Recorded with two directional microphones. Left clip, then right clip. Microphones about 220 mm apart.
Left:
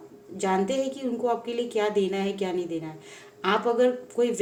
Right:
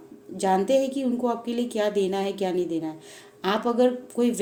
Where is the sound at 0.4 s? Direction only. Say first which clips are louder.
Right 4 dB; 55° right (ahead or behind).